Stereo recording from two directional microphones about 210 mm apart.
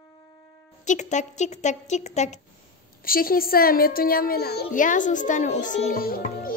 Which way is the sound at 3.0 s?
45° left (ahead or behind).